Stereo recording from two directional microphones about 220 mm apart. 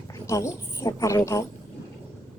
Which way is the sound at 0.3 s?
15° left (ahead or behind).